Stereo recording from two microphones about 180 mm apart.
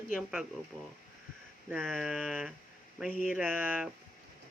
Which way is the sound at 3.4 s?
10° right (ahead or behind).